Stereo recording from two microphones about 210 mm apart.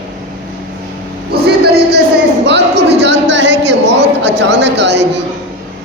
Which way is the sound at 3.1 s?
60° right (ahead or behind).